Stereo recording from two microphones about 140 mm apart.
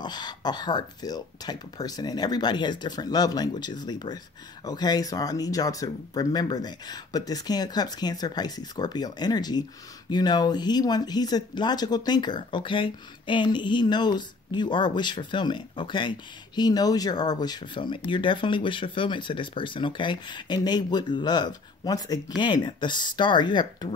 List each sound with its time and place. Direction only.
0.0 s speech: 30° left (ahead or behind)